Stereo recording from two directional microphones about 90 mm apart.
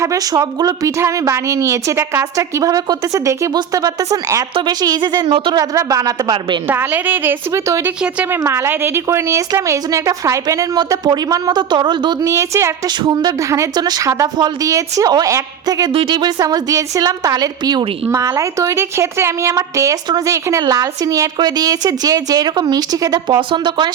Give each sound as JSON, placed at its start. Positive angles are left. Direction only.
{"t": 0.0, "sound": "a woman's voice", "side_deg": -40}
{"t": 2.6, "sound": "a woman's voice", "side_deg": -40}
{"t": 4.5, "sound": "a woman's voice", "side_deg": -50}
{"t": 5.7, "sound": "a woman's voice", "side_deg": -40}
{"t": 6.7, "sound": "a woman's voice", "side_deg": -20}
{"t": 8.4, "sound": "a woman's voice", "side_deg": -30}
{"t": 10.8, "sound": "a woman's voice", "side_deg": -45}
{"t": 12.2, "sound": "a woman's voice", "side_deg": -35}
{"t": 13.7, "sound": "a woman's voice", "side_deg": -50}
{"t": 15.9, "sound": "a woman's voice", "side_deg": -75}
{"t": 18.1, "sound": "a woman's voice", "side_deg": -35}
{"t": 23.5, "sound": "a woman's voice", "side_deg": -60}